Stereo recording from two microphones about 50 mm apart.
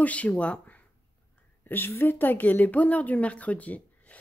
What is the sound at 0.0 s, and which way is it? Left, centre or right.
Speech, left.